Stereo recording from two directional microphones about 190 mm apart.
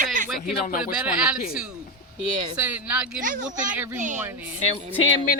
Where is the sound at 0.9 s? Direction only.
5° right (ahead or behind).